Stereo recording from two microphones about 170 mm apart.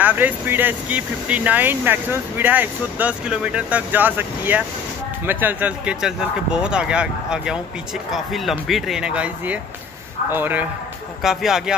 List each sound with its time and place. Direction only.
0.0 s speech: 10° right (ahead or behind)